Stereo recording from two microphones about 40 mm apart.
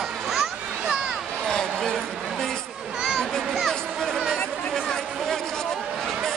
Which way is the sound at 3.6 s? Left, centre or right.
Centre.